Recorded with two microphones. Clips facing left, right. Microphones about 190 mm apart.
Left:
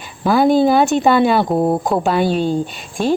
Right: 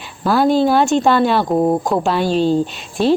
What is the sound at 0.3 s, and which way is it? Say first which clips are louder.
A woman's voice: left 1 dB; centre (ahead or behind).